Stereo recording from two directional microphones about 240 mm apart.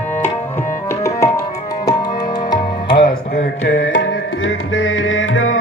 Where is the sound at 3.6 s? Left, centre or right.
Left.